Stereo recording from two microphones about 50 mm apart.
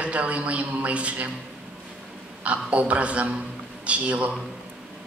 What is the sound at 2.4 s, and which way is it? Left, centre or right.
A man's voice, right.